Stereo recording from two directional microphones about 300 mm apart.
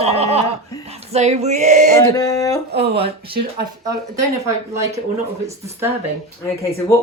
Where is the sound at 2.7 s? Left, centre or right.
Right.